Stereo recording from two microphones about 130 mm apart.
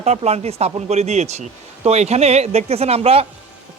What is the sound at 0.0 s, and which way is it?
Speech, 55° right (ahead or behind).